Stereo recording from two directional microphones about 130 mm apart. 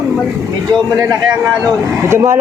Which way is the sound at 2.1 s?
20° right (ahead or behind).